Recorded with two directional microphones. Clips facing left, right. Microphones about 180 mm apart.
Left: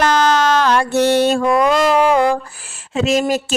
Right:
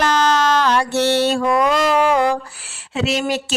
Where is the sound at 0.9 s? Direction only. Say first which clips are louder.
Left 4 dB; 15° left (ahead or behind).